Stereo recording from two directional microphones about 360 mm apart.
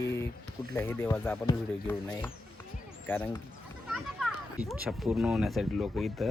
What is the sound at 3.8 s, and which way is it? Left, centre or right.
Children playing, centre.